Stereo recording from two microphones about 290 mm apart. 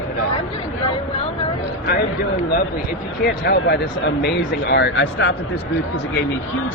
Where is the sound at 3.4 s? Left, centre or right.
Left.